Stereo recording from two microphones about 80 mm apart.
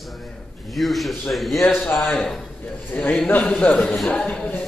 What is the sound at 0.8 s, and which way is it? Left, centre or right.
Speech, centre.